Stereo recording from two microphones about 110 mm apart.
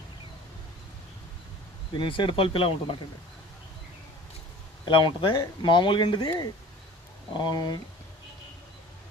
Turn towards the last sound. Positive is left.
turn(degrees=40)  # may be behind; listen again after turning